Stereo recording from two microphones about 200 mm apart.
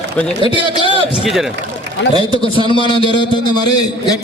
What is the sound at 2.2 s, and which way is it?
A man's voice, 25° left (ahead or behind).